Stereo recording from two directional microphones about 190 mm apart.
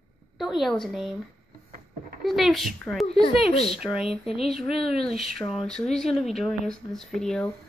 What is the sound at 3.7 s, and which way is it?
A woman's voice, centre (ahead or behind).